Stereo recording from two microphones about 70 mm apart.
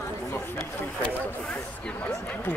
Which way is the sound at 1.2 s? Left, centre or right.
Centre.